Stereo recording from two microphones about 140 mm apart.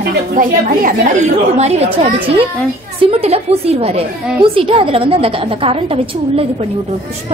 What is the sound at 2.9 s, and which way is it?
A woman's voice, 45° right (ahead or behind).